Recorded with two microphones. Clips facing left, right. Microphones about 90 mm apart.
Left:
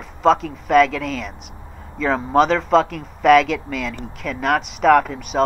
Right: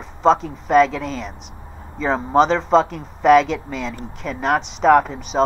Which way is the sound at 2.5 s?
Centre (ahead or behind).